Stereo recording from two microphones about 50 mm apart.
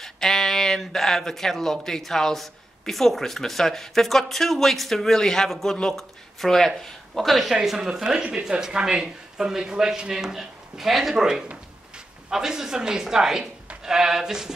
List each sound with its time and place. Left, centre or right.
0.0 s speech: centre